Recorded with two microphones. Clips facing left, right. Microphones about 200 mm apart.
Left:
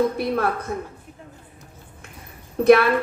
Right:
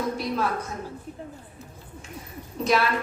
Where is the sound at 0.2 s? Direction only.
55° left (ahead or behind).